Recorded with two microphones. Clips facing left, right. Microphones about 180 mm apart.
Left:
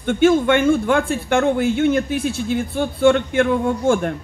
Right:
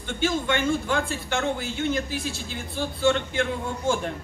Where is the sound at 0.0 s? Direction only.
55° left (ahead or behind).